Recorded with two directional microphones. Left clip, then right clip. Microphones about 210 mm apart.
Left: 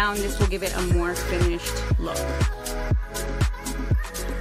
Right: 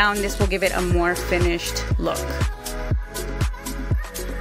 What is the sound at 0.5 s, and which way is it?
Speech, 15° right (ahead or behind).